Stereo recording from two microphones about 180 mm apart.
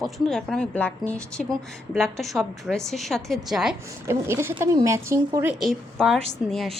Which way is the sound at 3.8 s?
15° right (ahead or behind).